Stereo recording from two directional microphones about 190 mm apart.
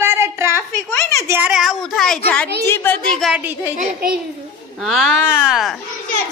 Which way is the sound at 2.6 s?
10° left (ahead or behind).